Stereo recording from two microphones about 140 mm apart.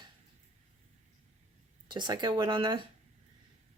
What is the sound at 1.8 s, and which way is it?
Speech, 30° right (ahead or behind).